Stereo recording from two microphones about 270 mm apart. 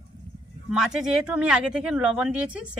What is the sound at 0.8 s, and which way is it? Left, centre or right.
Speech, centre.